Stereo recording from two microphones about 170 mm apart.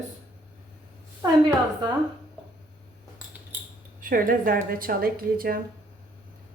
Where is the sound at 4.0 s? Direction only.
55° right (ahead or behind).